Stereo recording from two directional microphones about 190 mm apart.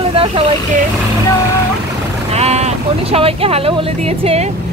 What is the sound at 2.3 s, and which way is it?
Speech, 35° right (ahead or behind).